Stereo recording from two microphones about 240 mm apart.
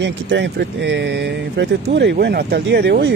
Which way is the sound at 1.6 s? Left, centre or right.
Right.